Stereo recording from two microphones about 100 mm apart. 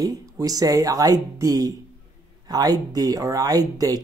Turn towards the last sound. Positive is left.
turn(degrees=-40)  # may be behind; listen again after turning